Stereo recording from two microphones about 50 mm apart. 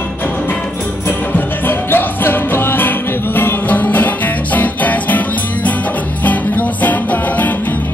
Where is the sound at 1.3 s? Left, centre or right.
Left.